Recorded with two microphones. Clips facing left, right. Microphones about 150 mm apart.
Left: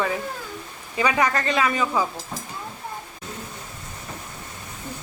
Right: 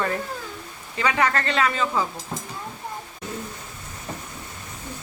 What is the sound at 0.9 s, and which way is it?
Speech, 15° left (ahead or behind).